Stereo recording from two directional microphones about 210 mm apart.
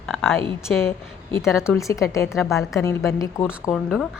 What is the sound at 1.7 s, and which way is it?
Speech, 15° left (ahead or behind).